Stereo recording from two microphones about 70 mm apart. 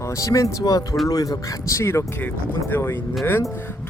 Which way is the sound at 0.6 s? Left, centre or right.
Left.